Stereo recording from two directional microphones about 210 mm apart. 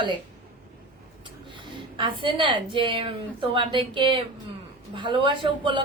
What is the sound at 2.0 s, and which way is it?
A woman's voice, 25° right (ahead or behind).